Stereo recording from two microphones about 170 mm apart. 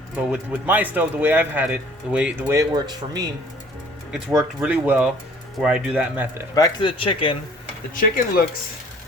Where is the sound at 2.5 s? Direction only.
20° right (ahead or behind).